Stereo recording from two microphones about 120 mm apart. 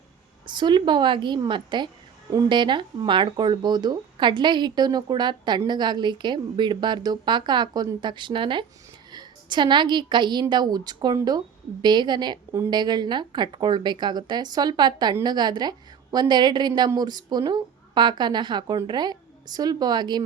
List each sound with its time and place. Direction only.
0.4 s a woman's voice: 40° right (ahead or behind)